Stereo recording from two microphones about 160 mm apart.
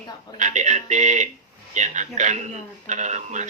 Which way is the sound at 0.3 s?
50° right (ahead or behind).